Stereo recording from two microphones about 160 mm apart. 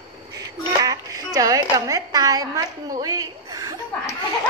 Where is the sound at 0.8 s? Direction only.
25° right (ahead or behind).